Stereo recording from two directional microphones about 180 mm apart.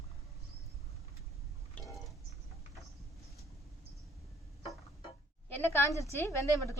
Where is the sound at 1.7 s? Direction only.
Centre (ahead or behind).